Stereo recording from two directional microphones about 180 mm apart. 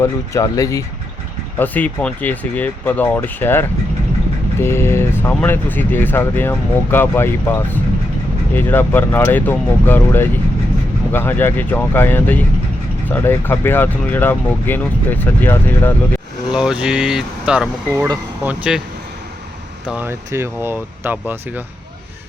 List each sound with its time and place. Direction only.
0.0 s speech: 15° left (ahead or behind)
16.6 s speech: 5° right (ahead or behind)
17.9 s speech: 15° right (ahead or behind)
19.9 s speech: 10° right (ahead or behind)